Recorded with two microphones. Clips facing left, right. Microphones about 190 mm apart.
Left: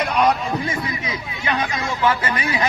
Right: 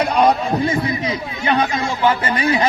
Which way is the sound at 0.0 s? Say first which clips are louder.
Right 3 dB; 30° right (ahead or behind).